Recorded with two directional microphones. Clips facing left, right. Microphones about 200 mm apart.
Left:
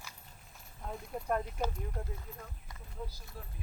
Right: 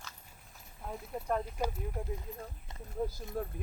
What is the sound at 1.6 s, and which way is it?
Speech, 10° right (ahead or behind).